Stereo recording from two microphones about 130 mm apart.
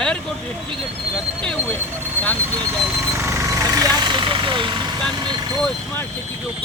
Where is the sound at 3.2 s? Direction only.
20° right (ahead or behind); by 4.8 s 40° right (ahead or behind).